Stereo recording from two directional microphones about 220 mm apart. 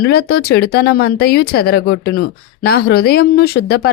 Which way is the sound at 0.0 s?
45° left (ahead or behind).